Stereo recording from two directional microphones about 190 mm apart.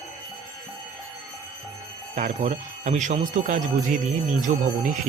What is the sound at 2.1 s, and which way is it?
Speech, 40° right (ahead or behind).